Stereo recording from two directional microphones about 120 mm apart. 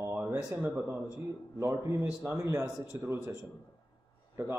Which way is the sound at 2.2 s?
25° right (ahead or behind).